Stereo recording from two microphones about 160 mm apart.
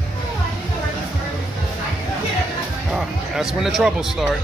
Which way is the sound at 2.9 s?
Centre (ahead or behind).